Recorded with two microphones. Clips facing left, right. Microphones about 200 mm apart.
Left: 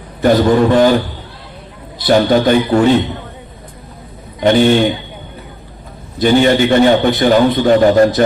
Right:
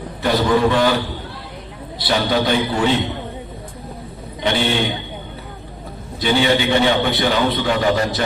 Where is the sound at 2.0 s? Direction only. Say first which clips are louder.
Left 8 dB; 45° left (ahead or behind).